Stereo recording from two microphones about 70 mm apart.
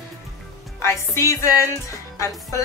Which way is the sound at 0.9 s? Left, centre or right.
Left.